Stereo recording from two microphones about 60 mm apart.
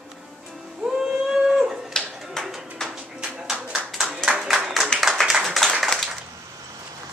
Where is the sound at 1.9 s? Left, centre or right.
Centre.